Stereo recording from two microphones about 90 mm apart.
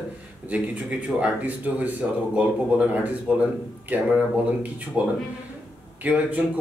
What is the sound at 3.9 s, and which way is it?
Speech, 20° right (ahead or behind).